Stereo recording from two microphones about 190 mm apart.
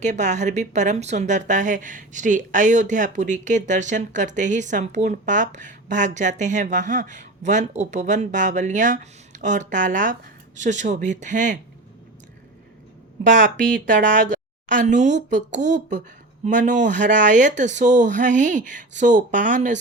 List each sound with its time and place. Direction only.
0.0 s speech: 40° right (ahead or behind)
14.1 s speech: 40° right (ahead or behind)